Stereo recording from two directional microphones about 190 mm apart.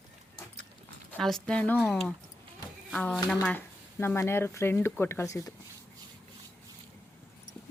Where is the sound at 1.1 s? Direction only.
5° left (ahead or behind).